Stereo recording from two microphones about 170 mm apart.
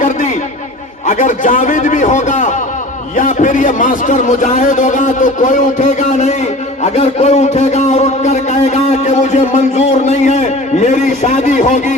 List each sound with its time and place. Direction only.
0.0 s a man's voice: 45° left (ahead or behind)